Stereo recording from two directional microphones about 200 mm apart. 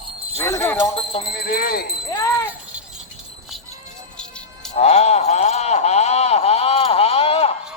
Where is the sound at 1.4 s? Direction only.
50° left (ahead or behind).